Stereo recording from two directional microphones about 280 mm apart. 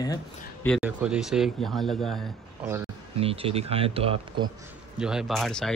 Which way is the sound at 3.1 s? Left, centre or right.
Right.